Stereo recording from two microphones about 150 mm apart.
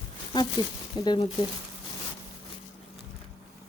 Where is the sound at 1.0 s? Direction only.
30° left (ahead or behind).